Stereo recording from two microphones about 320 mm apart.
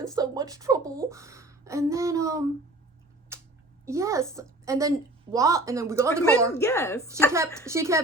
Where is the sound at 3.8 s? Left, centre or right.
Centre.